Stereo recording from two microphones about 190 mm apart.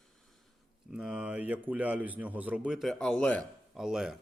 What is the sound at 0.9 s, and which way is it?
Speech, 5° right (ahead or behind).